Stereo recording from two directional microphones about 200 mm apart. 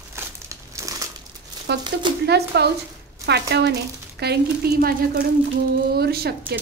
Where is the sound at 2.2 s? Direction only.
55° right (ahead or behind).